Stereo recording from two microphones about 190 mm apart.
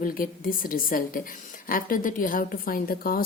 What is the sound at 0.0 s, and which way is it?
A woman's voice, 45° left (ahead or behind).